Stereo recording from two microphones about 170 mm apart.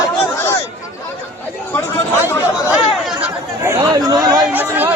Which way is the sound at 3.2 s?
15° right (ahead or behind).